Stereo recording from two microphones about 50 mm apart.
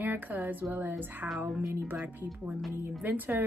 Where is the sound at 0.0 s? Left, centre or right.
Right.